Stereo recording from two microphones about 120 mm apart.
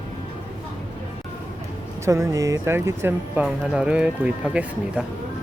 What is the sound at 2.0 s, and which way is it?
Speech, 25° right (ahead or behind).